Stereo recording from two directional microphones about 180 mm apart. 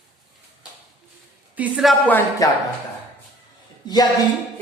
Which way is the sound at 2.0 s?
10° left (ahead or behind).